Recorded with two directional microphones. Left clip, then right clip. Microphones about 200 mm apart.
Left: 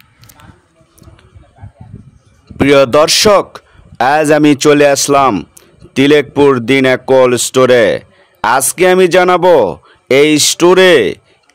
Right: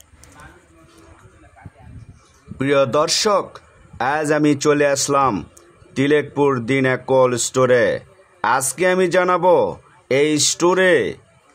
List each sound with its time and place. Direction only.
2.5 s a man's voice: 45° left (ahead or behind)